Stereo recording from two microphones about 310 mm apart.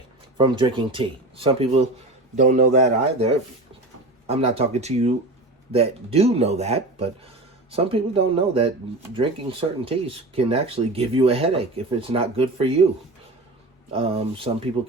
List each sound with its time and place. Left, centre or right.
0.3 s speech: centre
13.9 s speech: centre